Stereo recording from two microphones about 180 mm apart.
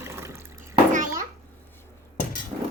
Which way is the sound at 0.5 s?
45° right (ahead or behind).